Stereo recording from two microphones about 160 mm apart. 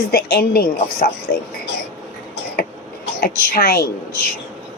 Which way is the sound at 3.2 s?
65° left (ahead or behind).